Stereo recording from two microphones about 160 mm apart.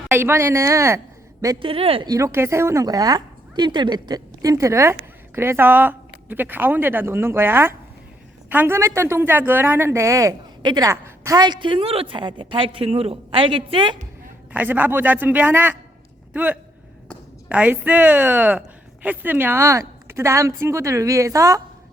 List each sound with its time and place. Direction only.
0.1 s a woman's voice: 15° right (ahead or behind)
1.6 s a woman's voice: 35° right (ahead or behind)
2.0 s a woman's voice: 20° right (ahead or behind)
11.3 s a woman's voice: 25° right (ahead or behind)
14.5 s a woman's voice: 10° right (ahead or behind)